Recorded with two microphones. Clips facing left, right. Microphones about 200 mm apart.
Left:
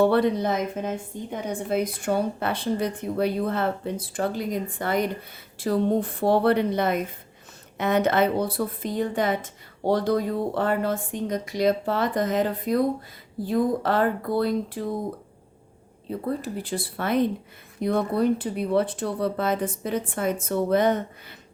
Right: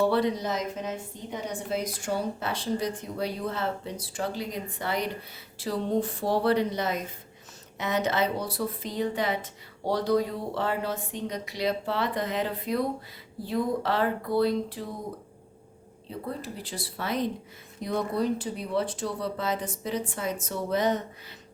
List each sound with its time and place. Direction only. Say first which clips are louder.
0.0 s a woman's voice: left 5 dB; 55° left (ahead or behind)
16.0 s a woman's voice: left 7 dB; 50° left (ahead or behind)